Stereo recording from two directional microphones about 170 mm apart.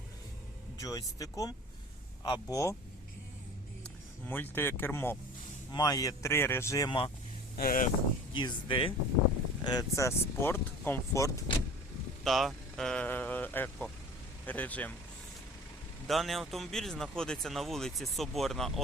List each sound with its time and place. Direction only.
0.8 s speech: 20° left (ahead or behind)
3.8 s speech: 10° left (ahead or behind)
7.5 s speech: 55° left (ahead or behind)
8.3 s speech: 30° left (ahead or behind)
12.2 s speech: centre (ahead or behind)
16.0 s speech: centre (ahead or behind)